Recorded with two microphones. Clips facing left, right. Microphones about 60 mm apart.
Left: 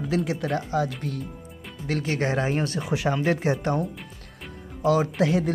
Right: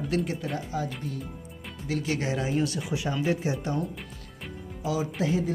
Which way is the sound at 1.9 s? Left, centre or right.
Left.